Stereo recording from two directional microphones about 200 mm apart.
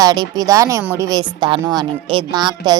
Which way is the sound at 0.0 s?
20° right (ahead or behind).